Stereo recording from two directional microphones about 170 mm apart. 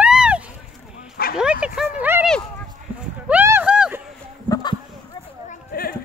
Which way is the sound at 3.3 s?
10° right (ahead or behind).